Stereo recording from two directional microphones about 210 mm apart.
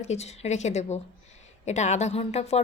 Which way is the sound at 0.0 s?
30° left (ahead or behind).